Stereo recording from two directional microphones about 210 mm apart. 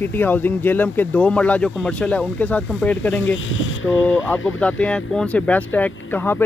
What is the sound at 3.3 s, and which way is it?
Speech, 70° left (ahead or behind).